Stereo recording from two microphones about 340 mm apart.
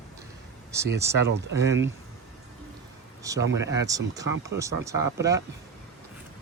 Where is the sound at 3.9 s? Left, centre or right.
Centre.